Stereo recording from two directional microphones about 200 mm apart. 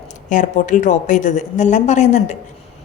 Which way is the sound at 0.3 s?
40° left (ahead or behind).